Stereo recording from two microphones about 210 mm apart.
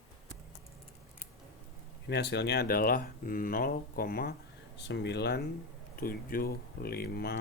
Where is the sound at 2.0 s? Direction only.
55° left (ahead or behind).